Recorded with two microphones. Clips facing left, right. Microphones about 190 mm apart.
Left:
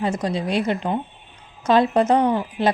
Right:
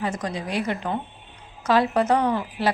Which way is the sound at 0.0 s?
25° left (ahead or behind).